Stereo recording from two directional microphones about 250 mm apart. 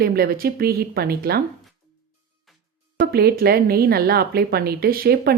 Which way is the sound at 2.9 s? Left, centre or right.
Right.